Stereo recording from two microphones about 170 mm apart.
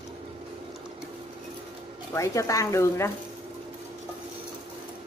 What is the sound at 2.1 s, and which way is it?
Speech, 20° left (ahead or behind).